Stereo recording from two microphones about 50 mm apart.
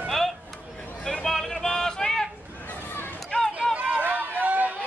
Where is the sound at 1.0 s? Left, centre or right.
Centre.